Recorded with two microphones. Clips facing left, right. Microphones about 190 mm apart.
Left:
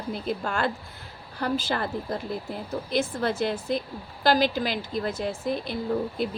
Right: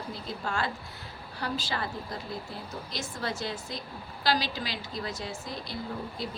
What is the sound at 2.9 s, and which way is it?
A woman's voice, 55° left (ahead or behind).